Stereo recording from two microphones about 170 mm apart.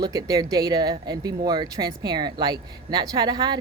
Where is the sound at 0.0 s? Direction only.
20° right (ahead or behind).